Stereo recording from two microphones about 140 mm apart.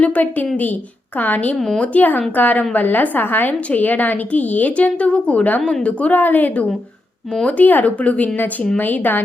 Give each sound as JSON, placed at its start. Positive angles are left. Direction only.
{"t": 0.0, "sound": "speech", "side_deg": 10}